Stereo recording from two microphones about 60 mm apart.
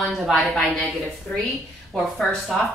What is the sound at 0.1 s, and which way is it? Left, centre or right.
Speech, centre.